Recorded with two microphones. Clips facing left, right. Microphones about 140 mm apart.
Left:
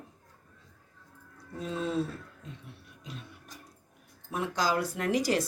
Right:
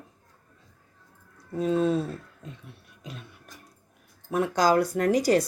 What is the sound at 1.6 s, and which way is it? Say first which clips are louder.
Speech: right 8 dB; 50° right (ahead or behind).